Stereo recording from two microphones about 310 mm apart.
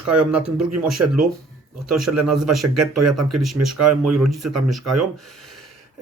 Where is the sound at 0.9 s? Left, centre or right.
Right.